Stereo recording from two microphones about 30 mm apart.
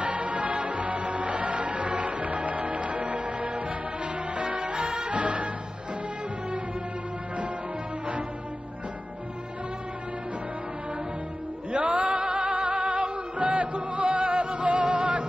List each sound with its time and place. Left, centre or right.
0.0 s music: right
11.7 s music: right